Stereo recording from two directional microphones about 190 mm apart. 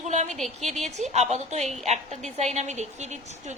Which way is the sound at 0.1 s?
40° right (ahead or behind).